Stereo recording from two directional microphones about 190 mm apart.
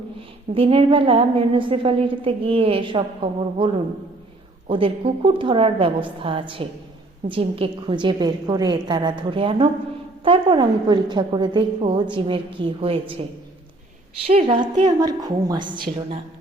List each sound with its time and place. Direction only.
0.5 s a woman's voice: 30° right (ahead or behind)
4.7 s a woman's voice: 30° right (ahead or behind)
14.3 s a woman's voice: 30° right (ahead or behind)